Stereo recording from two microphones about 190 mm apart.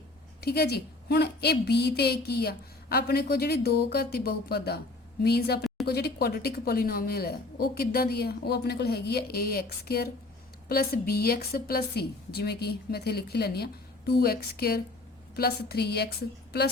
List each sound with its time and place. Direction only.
0.4 s a woman's voice: 55° left (ahead or behind)